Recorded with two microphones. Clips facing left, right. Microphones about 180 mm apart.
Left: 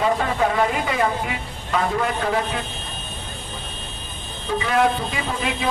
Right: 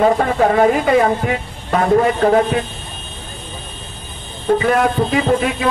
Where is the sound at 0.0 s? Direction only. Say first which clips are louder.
Right 7 dB; 50° right (ahead or behind).